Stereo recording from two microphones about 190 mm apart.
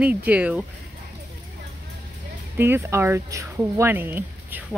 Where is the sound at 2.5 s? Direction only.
10° right (ahead or behind).